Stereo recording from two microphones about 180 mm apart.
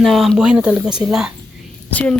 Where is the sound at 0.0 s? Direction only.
Centre (ahead or behind).